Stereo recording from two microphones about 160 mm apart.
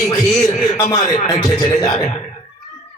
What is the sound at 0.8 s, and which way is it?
A man's voice, 20° left (ahead or behind).